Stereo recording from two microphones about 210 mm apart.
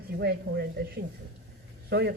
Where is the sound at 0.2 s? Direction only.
50° right (ahead or behind).